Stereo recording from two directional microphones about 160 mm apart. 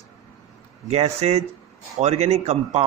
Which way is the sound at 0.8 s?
40° right (ahead or behind).